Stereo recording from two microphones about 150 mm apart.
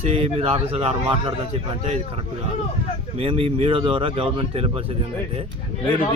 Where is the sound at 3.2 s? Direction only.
40° right (ahead or behind).